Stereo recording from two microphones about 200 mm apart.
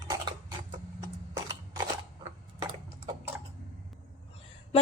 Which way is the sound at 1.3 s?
15° right (ahead or behind).